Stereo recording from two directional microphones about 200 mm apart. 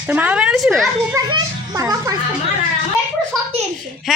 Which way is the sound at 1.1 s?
15° right (ahead or behind).